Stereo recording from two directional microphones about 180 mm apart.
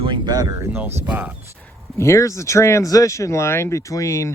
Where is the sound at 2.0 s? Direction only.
15° left (ahead or behind).